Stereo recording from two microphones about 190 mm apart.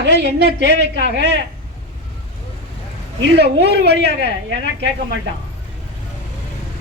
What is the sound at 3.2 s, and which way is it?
Speech, 65° right (ahead or behind).